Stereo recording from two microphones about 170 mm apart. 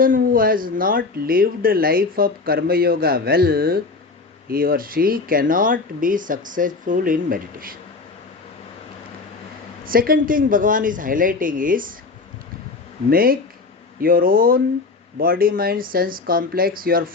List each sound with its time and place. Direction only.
0.0 s speech: 55° right (ahead or behind)
9.8 s speech: 60° right (ahead or behind)
13.1 s speech: 60° right (ahead or behind)